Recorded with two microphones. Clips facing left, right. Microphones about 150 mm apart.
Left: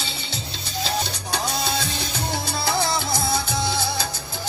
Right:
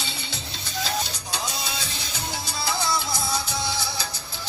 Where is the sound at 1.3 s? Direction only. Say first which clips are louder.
Left 6 dB; 60° left (ahead or behind).